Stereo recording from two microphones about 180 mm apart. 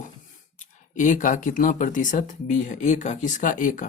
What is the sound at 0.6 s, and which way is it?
Speech, 45° left (ahead or behind).